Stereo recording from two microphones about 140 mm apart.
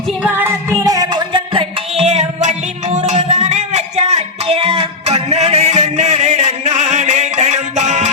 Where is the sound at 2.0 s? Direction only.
50° right (ahead or behind).